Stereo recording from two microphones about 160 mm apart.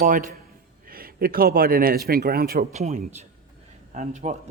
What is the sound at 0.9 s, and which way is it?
A man's voice, 65° right (ahead or behind).